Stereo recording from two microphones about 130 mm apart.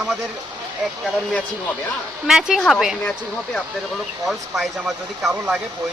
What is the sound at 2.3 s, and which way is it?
Speech, 5° right (ahead or behind).